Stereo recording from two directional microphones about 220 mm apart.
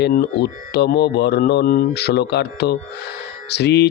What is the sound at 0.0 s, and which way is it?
A man's voice, 50° left (ahead or behind).